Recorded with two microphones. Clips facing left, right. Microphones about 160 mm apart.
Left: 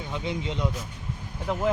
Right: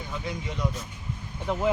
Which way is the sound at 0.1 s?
20° left (ahead or behind).